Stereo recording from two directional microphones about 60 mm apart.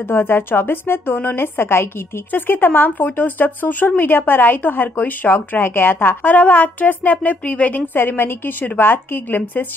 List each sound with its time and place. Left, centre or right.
0.1 s speech: left
2.3 s speech: left